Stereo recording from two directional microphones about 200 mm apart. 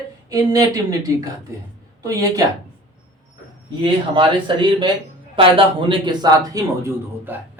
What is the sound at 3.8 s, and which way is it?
A man's voice, 25° right (ahead or behind).